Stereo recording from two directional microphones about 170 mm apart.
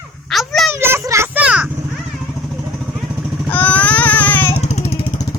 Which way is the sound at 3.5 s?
10° left (ahead or behind).